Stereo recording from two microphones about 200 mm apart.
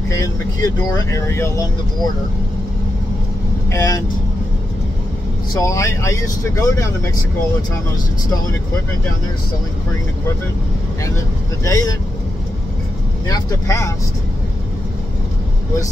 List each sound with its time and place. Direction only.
0.1 s speech: 15° left (ahead or behind)
3.7 s speech: 15° left (ahead or behind)
5.5 s speech: 15° left (ahead or behind)
11.6 s speech: 15° left (ahead or behind)
13.3 s speech: 15° left (ahead or behind)